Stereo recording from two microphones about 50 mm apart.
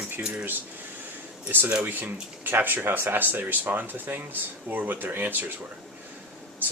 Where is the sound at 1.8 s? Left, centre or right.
Right.